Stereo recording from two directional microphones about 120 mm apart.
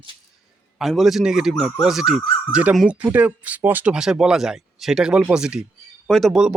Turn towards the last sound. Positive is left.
turn(degrees=-5)  # may be behind; listen again after turning